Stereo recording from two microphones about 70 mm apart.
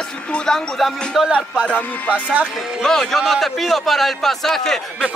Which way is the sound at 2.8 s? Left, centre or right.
Centre.